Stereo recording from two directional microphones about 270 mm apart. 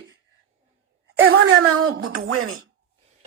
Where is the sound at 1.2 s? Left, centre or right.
Right.